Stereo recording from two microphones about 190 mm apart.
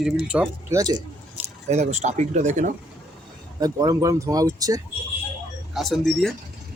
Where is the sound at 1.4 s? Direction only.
10° right (ahead or behind).